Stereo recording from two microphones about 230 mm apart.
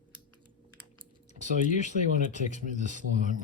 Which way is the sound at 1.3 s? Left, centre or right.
Right.